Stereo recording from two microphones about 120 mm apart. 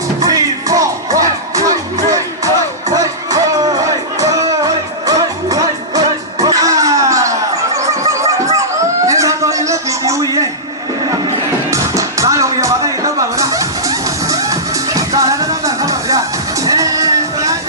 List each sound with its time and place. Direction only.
0.2 s music: 30° right (ahead or behind)
9.0 s a sound: 25° right (ahead or behind)
11.7 s music: 25° right (ahead or behind)